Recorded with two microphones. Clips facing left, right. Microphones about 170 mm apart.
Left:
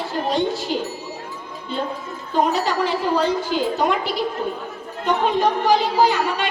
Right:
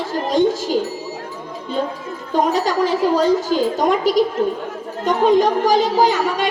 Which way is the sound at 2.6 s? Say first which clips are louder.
Right 4 dB; 40° right (ahead or behind).